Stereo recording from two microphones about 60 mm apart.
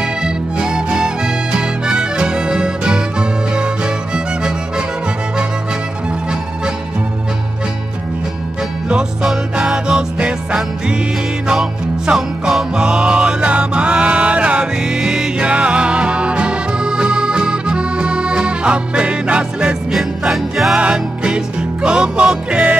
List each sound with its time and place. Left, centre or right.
0.0 s music: centre
9.2 s music: centre
12.2 s music: centre
12.7 s music: centre
19.9 s music: centre
20.8 s music: centre